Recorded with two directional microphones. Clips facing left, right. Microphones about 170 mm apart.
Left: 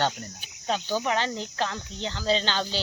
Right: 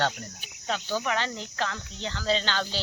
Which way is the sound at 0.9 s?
20° left (ahead or behind).